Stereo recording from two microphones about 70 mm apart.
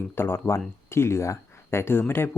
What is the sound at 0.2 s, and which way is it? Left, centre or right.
Speech, left.